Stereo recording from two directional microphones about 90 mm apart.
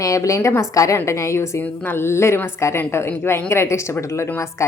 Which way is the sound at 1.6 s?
20° left (ahead or behind).